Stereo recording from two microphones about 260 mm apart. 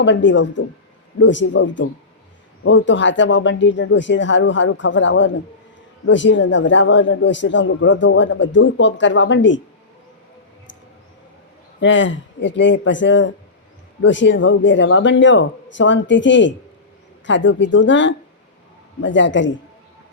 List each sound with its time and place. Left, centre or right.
0.0 s a man's voice: left
11.8 s a man's voice: left